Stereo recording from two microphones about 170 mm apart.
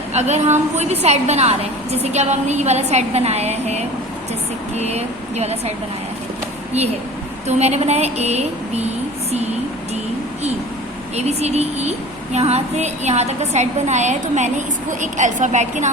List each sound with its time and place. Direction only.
0.1 s a woman's voice: 40° right (ahead or behind)
7.4 s a woman's voice: 40° right (ahead or behind)
11.2 s a woman's voice: 40° right (ahead or behind)